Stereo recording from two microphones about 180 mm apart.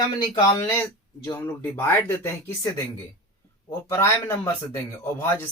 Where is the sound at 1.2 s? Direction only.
15° left (ahead or behind).